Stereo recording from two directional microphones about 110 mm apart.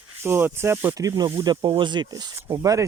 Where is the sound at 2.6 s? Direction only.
30° right (ahead or behind).